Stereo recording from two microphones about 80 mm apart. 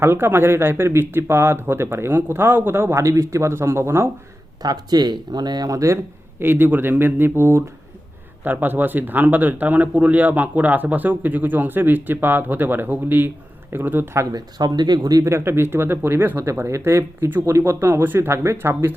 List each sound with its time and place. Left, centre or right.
0.0 s speech: right
4.6 s speech: right
6.4 s speech: right
14.3 s speech: right
15.2 s speech: right